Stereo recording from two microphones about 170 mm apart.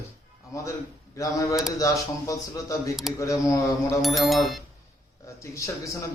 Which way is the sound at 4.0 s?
Centre (ahead or behind).